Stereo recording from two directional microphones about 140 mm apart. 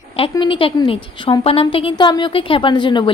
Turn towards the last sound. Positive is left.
turn(degrees=35)  # may be behind; listen again after turning